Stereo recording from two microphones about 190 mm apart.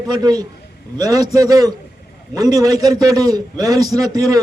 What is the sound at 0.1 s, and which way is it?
A man's voice, 20° right (ahead or behind).